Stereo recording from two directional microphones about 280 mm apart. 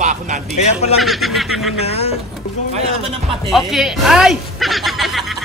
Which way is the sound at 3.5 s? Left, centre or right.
Centre.